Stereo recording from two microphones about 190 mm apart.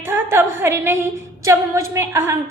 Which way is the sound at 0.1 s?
10° right (ahead or behind).